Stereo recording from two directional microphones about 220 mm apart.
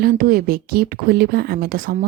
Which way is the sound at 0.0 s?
40° right (ahead or behind).